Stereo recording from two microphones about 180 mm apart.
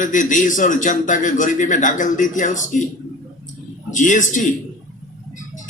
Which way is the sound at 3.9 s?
45° left (ahead or behind).